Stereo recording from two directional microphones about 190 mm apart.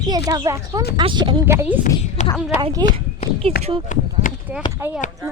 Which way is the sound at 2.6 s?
20° right (ahead or behind).